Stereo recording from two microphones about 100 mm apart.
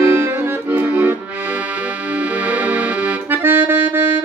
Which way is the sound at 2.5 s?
15° right (ahead or behind).